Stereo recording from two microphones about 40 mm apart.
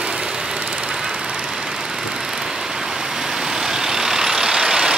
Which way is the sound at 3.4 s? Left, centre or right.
Centre.